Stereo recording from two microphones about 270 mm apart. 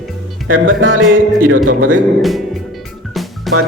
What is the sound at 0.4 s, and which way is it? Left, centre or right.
Speech, right.